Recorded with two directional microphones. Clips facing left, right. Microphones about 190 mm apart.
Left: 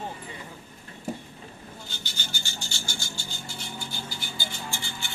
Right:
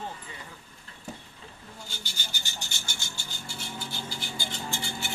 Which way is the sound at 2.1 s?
15° right (ahead or behind).